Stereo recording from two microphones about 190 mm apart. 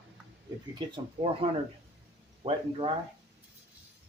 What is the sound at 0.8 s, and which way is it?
Speech, 25° right (ahead or behind).